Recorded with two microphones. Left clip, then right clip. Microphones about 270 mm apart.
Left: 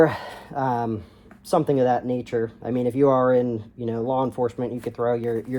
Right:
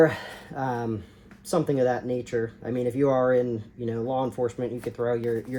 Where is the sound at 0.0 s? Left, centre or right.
Centre.